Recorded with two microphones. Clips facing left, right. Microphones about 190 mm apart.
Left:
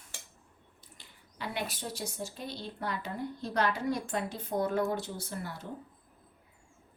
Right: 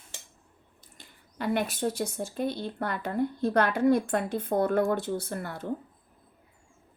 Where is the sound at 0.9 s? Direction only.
50° right (ahead or behind).